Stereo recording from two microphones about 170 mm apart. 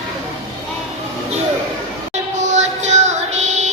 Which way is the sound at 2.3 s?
45° right (ahead or behind).